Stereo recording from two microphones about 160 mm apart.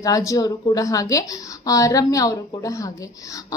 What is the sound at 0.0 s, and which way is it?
A child's voice, 20° left (ahead or behind).